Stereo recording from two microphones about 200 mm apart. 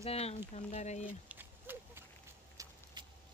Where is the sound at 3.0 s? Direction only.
20° right (ahead or behind).